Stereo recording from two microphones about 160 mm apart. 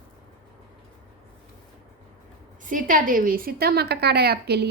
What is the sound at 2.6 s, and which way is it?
A woman's voice, 55° right (ahead or behind).